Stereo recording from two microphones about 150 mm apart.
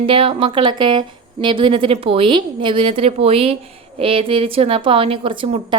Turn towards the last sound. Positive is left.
turn(degrees=-35)  # may be behind; listen again after turning